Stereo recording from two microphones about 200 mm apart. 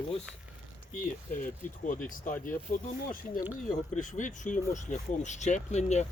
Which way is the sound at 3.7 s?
40° left (ahead or behind).